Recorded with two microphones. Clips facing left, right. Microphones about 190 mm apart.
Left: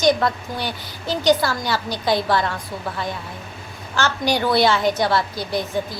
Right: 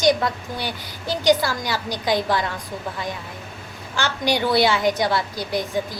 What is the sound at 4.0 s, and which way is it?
A woman's voice, 15° right (ahead or behind).